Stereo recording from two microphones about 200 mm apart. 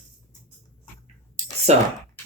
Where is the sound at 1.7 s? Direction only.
35° right (ahead or behind).